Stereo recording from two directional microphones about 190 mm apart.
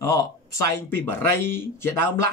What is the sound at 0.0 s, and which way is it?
Speech, 20° left (ahead or behind).